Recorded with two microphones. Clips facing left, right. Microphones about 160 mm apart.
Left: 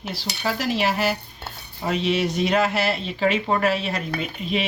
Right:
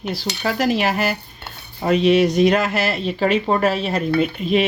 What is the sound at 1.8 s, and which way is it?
Speech, 55° right (ahead or behind).